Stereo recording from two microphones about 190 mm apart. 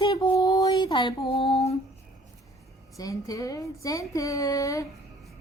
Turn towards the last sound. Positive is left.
turn(degrees=15)  # may be behind; listen again after turning